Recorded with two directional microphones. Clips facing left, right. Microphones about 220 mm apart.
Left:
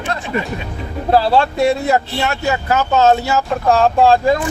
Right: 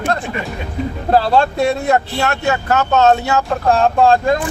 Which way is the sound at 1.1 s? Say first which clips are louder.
Even; 5° left (ahead or behind).